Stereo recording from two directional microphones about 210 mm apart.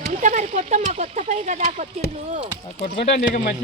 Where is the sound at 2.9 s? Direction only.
30° left (ahead or behind).